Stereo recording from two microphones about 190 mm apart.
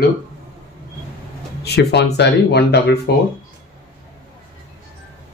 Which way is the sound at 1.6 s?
60° left (ahead or behind).